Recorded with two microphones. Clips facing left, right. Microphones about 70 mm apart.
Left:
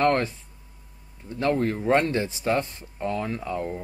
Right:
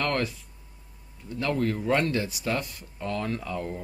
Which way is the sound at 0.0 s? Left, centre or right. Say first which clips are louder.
Left 6 dB; left.